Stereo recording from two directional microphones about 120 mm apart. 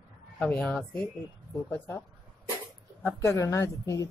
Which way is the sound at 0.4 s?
10° left (ahead or behind).